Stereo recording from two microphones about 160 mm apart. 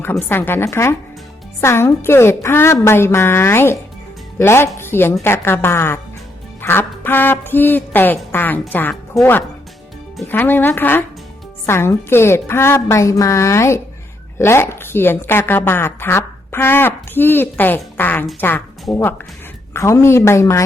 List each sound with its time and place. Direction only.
0.0 s a woman's voice: 15° left (ahead or behind)
4.8 s a sound: 15° left (ahead or behind)
5.2 s a woman's voice: 15° left (ahead or behind)
6.6 s music: 15° left (ahead or behind)
10.3 s a woman's voice: 10° left (ahead or behind)
19.7 s a woman's voice: 15° left (ahead or behind)